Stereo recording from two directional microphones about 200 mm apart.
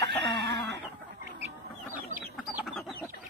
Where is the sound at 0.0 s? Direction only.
60° right (ahead or behind).